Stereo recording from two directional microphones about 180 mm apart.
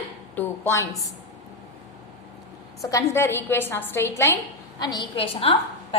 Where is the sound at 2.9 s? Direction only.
15° left (ahead or behind).